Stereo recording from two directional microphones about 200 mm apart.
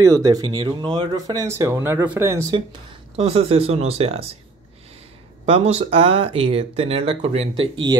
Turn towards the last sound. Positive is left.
turn(degrees=-20)  # may be behind; listen again after turning